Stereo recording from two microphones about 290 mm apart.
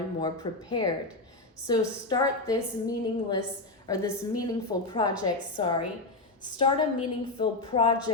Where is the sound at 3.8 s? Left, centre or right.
Centre.